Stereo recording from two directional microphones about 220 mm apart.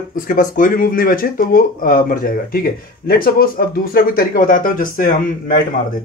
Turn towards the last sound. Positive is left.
turn(degrees=40)  # may be behind; listen again after turning